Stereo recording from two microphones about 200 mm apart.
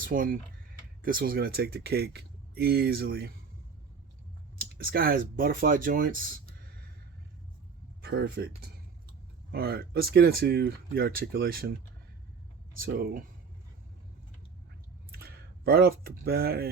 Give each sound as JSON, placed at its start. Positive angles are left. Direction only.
{"t": 0.0, "sound": "speech", "side_deg": -45}
{"t": 4.5, "sound": "speech", "side_deg": -50}
{"t": 8.0, "sound": "speech", "side_deg": -55}
{"t": 12.7, "sound": "speech", "side_deg": -50}
{"t": 15.1, "sound": "speech", "side_deg": -50}